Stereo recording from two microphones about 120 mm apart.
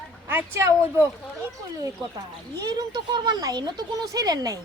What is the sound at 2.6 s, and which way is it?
Speech, 35° right (ahead or behind).